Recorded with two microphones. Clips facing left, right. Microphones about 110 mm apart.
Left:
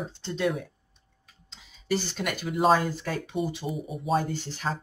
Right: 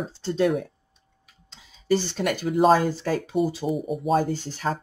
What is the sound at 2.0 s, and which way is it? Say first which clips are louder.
Speech: right 5 dB; 40° right (ahead or behind).